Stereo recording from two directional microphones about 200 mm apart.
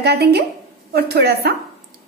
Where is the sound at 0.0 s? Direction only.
55° right (ahead or behind).